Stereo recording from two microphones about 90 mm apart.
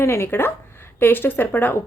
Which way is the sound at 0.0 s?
30° left (ahead or behind).